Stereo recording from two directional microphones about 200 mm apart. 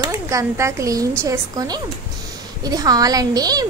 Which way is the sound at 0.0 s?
15° right (ahead or behind).